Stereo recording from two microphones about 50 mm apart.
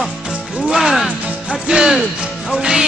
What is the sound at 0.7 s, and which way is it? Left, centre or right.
Music, centre.